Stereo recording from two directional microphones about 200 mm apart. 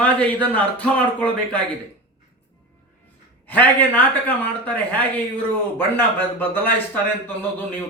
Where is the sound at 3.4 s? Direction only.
10° left (ahead or behind).